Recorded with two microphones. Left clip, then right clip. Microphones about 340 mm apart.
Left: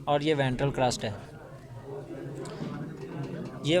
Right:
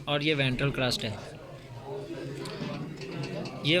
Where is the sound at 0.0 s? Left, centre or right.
Left.